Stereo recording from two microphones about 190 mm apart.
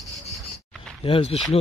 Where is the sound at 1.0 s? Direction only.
30° left (ahead or behind).